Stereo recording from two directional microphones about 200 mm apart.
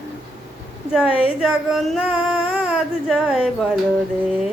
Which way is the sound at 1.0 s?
30° left (ahead or behind).